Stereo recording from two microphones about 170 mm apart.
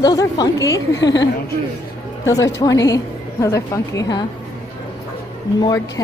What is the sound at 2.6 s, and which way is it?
Speech, 20° left (ahead or behind).